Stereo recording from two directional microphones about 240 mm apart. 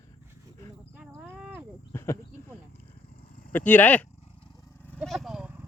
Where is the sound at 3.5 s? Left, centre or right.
Centre.